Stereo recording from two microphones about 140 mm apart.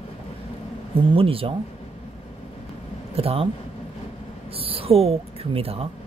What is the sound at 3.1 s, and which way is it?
Speech, 45° right (ahead or behind).